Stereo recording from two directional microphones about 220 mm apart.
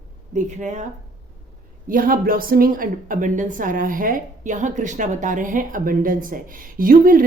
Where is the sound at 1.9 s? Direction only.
40° right (ahead or behind).